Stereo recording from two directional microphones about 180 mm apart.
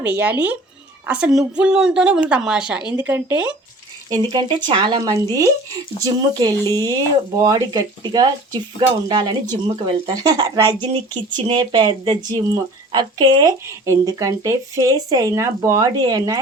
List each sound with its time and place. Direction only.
0.0 s speech: 10° right (ahead or behind)
4.1 s speech: 20° right (ahead or behind)